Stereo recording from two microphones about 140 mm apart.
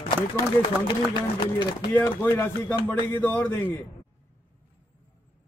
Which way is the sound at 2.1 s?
15° left (ahead or behind).